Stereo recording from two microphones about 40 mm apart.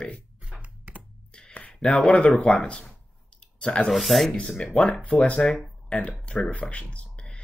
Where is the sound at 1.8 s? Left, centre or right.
Left.